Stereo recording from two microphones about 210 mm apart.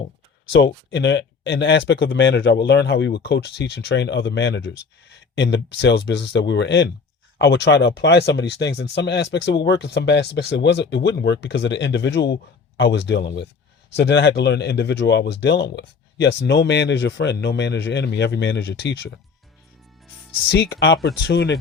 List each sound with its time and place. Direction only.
0.5 s speech: 55° left (ahead or behind)
20.5 s speech: 55° left (ahead or behind)